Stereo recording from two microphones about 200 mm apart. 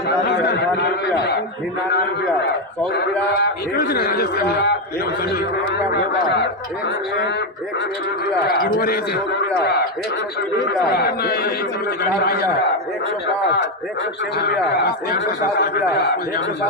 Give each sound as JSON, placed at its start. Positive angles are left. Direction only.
{"t": 0.4, "sound": "a man's voice", "side_deg": 50}
{"t": 2.9, "sound": "a man's voice", "side_deg": 55}
{"t": 8.5, "sound": "a man's voice", "side_deg": 50}
{"t": 10.9, "sound": "a man's voice", "side_deg": 50}
{"t": 14.4, "sound": "a man's voice", "side_deg": 55}